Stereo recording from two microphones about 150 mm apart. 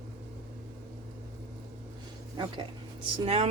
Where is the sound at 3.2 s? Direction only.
45° right (ahead or behind).